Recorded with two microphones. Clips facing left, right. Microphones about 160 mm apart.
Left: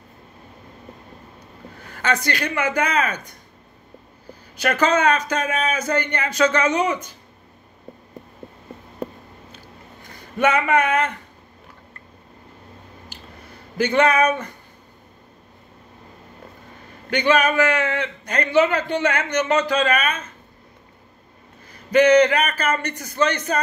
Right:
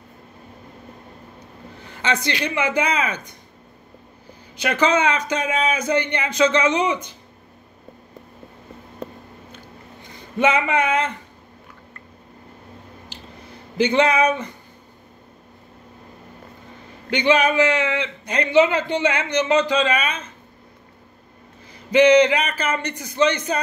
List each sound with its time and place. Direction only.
1.9 s a man's voice: 20° right (ahead or behind)
4.6 s a man's voice: 20° right (ahead or behind)
10.4 s a man's voice: 20° right (ahead or behind)
13.7 s a man's voice: 20° right (ahead or behind)
17.1 s a man's voice: 20° right (ahead or behind)
17.7 s speech: 45° left (ahead or behind)
18.2 s a man's voice: 20° right (ahead or behind)
21.9 s a man's voice: 20° right (ahead or behind)